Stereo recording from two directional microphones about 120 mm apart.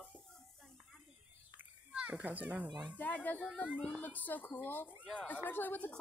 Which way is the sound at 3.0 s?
15° left (ahead or behind).